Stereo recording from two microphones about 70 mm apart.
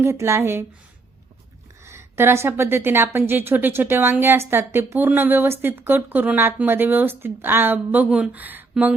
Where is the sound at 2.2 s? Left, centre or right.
Right.